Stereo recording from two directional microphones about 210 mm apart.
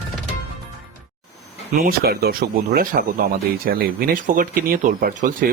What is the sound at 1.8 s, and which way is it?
Speech, 45° right (ahead or behind).